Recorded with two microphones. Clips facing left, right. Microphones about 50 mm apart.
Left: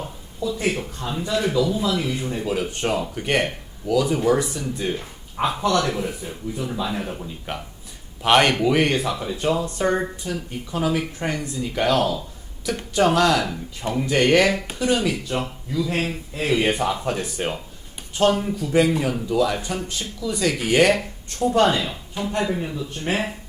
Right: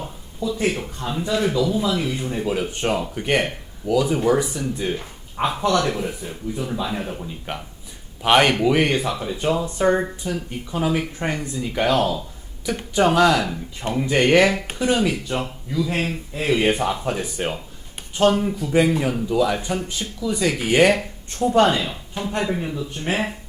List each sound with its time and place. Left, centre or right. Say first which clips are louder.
1.2 s speech: right 1 dB; centre
4.4 s speech: right 2 dB; right
4.8 s speech: right 1 dB; centre
5.9 s speech: right 1 dB; centre
11.3 s speech: right 1 dB; right
11.6 s speech: right 1 dB; centre
14.2 s speech: right 1 dB; right
15.3 s speech: even; centre
16.6 s speech: right 2 dB; right
16.8 s speech: even; centre
18.6 s speech: even; centre
22.4 s speech: right 1 dB; centre